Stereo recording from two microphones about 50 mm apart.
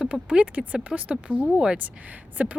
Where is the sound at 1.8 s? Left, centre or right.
Right.